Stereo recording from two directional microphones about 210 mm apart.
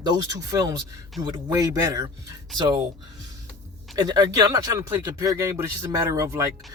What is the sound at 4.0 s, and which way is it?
Speech, 20° right (ahead or behind).